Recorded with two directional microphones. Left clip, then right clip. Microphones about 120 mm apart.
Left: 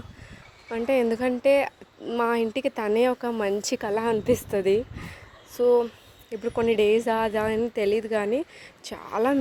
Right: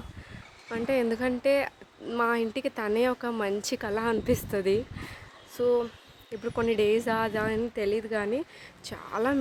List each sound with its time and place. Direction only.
0.7 s a woman's voice: 30° left (ahead or behind)
4.1 s speech: 20° left (ahead or behind)
5.5 s a woman's voice: 40° left (ahead or behind)
8.3 s a woman's voice: 30° left (ahead or behind)